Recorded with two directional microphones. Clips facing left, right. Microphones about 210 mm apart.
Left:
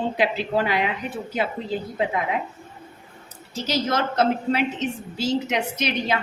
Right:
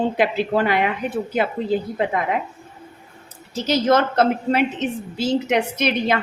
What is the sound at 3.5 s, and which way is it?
A woman's voice, 55° right (ahead or behind).